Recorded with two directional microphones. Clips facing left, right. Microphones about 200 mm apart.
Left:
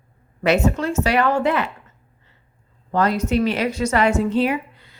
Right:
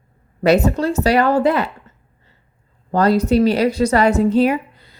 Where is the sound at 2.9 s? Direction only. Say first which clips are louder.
Right 5 dB; 35° right (ahead or behind).